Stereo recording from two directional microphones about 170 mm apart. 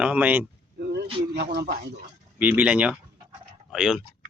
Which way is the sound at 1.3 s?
75° right (ahead or behind).